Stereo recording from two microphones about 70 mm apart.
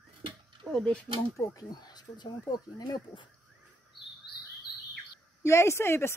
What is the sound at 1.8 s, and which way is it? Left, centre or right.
Speech, left.